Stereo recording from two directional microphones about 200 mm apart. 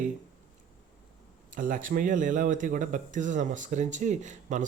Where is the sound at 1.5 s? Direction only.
40° right (ahead or behind).